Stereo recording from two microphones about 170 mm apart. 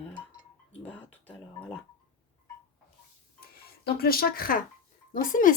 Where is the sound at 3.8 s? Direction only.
65° left (ahead or behind).